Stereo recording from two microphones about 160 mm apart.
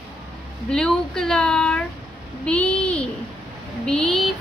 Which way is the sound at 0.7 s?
5° left (ahead or behind).